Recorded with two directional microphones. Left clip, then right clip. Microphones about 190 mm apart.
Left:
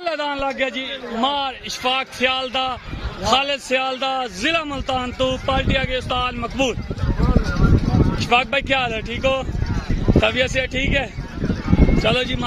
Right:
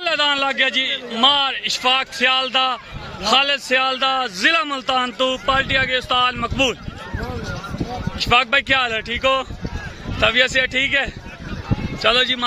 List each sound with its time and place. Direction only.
0.0 s a man's voice: centre (ahead or behind)
8.2 s a man's voice: 5° left (ahead or behind)